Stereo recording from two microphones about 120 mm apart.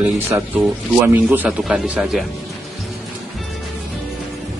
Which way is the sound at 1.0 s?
15° right (ahead or behind).